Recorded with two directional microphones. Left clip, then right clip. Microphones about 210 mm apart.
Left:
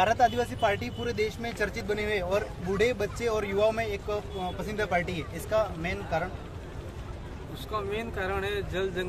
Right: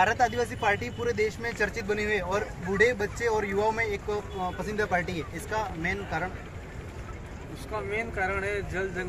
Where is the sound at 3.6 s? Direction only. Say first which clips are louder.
Left 1 dB; 25° left (ahead or behind).